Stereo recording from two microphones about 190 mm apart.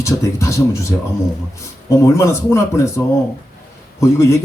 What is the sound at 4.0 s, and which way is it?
Speech, 15° left (ahead or behind).